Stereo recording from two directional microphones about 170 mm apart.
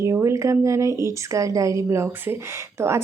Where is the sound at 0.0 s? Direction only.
15° right (ahead or behind).